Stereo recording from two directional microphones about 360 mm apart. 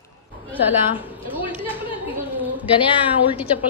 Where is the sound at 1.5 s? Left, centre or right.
Centre.